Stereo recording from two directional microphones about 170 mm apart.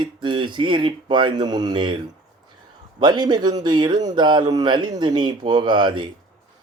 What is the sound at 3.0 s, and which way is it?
A man's voice, 25° right (ahead or behind).